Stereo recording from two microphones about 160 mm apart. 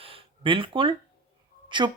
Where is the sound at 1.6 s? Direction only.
30° right (ahead or behind).